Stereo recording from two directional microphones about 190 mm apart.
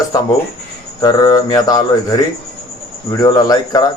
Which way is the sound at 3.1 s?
20° left (ahead or behind).